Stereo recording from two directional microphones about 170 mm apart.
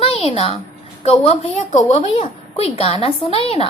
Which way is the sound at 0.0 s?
35° left (ahead or behind).